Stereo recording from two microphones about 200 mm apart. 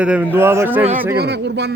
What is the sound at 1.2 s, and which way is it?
Speech, 55° right (ahead or behind).